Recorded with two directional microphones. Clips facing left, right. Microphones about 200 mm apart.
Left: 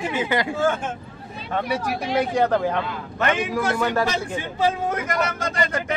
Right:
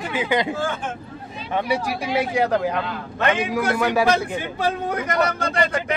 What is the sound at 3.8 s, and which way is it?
Speech, 10° right (ahead or behind).